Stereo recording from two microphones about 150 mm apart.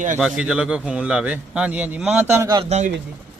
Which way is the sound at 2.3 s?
20° right (ahead or behind).